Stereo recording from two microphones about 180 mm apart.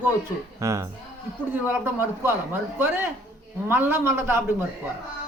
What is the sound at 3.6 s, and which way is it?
Speech, 10° right (ahead or behind).